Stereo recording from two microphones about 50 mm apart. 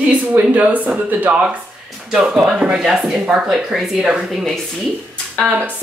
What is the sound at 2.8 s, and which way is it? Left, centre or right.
Speech, centre.